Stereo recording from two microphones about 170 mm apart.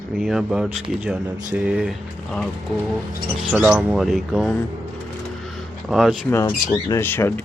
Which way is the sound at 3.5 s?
10° right (ahead or behind).